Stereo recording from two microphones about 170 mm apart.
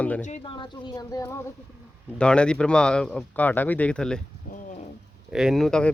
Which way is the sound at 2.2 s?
5° left (ahead or behind).